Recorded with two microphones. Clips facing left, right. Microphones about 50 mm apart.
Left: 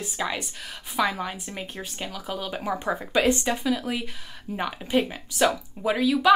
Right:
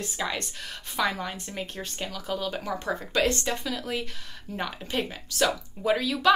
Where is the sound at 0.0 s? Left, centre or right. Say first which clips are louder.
Left 2 dB; centre.